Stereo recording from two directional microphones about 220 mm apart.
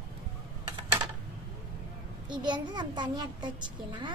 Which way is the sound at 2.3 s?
20° right (ahead or behind).